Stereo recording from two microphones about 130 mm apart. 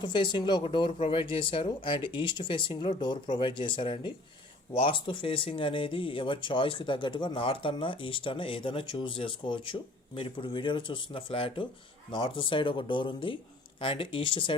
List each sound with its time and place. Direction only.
0.0 s speech: 35° left (ahead or behind)